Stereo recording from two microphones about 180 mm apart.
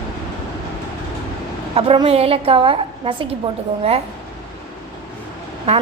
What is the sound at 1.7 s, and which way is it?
A woman's voice, 30° right (ahead or behind).